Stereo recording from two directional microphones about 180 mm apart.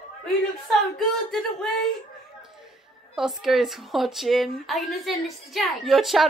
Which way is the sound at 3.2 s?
Centre (ahead or behind).